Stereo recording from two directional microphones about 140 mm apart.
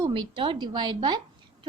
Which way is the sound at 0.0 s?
35° right (ahead or behind).